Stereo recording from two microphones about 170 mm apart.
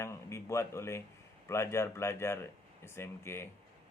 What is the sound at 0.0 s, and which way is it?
Speech, 15° left (ahead or behind).